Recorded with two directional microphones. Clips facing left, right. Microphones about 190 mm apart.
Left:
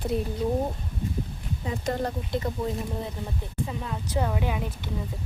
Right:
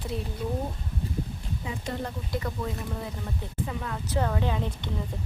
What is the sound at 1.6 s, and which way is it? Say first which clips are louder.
Speech: left 5 dB; 40° left (ahead or behind).